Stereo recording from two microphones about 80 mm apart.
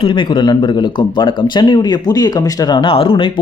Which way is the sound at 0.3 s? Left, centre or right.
Left.